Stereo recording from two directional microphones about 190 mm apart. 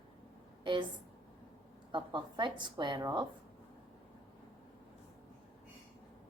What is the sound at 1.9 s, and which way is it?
A woman's voice, 25° right (ahead or behind).